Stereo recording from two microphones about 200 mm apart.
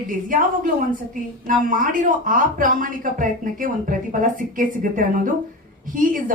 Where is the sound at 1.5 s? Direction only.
40° right (ahead or behind).